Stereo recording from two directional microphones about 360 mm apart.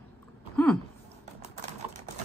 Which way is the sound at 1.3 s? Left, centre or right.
Centre.